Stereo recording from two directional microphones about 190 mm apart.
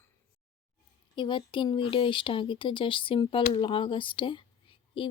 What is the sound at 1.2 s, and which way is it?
Speech, 25° left (ahead or behind).